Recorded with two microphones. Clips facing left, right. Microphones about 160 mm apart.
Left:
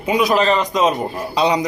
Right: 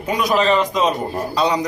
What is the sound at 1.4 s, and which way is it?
Speech, 10° left (ahead or behind).